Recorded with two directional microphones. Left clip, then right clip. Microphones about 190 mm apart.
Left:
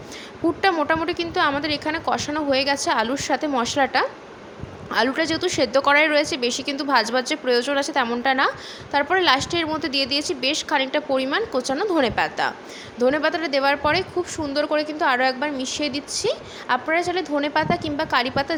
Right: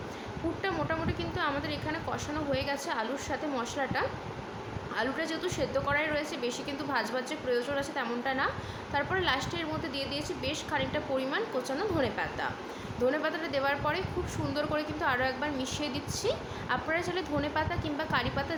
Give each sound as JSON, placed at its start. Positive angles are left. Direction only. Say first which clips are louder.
{"t": 0.6, "sound": "a woman's voice", "louder": "left 12 dB", "side_deg": 50}